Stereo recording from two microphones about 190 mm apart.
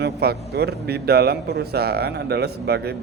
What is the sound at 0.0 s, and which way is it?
A man's voice, 55° right (ahead or behind).